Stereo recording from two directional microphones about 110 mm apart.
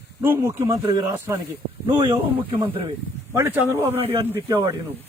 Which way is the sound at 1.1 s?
25° right (ahead or behind).